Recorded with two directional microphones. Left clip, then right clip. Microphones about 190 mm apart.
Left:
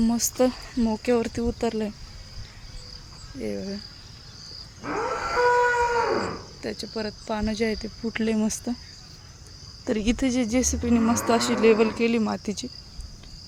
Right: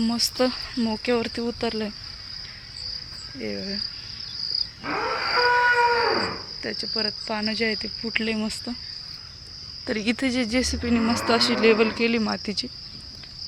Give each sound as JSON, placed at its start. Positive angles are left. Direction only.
{"t": 0.0, "sound": "speech", "side_deg": 15}
{"t": 3.3, "sound": "cricket", "side_deg": 0}
{"t": 4.9, "sound": "wild animals", "side_deg": 55}
{"t": 6.6, "sound": "cricket", "side_deg": 0}
{"t": 6.8, "sound": "speech", "side_deg": 0}
{"t": 9.8, "sound": "speech", "side_deg": 20}
{"t": 11.3, "sound": "cricket", "side_deg": 5}